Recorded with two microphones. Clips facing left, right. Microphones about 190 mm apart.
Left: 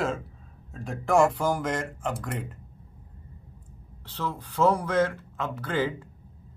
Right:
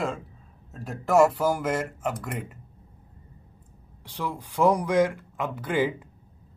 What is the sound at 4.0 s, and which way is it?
Speech, 15° right (ahead or behind).